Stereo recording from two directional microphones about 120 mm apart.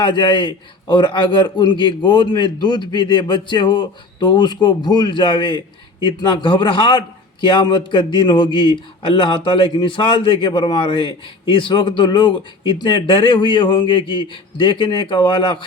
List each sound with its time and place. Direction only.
0.0 s a man's voice: 40° left (ahead or behind)